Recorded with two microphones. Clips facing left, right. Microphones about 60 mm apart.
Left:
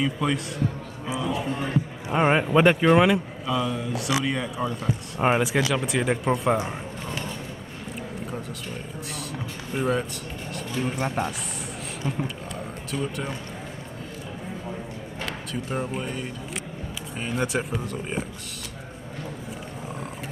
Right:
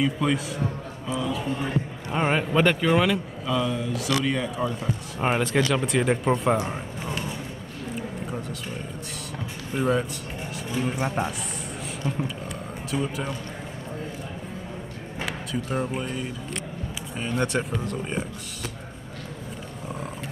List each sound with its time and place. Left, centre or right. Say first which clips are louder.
0.0 s a man's voice: right 1 dB; centre
1.0 s speech: even; centre
3.4 s a man's voice: right 2 dB; centre
9.8 s a man's voice: right 1 dB; centre
15.2 s a man's voice: right 2 dB; centre